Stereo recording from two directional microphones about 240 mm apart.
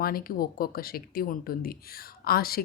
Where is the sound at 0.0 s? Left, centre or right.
Left.